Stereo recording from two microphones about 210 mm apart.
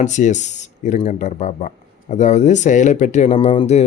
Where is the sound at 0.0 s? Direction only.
35° left (ahead or behind).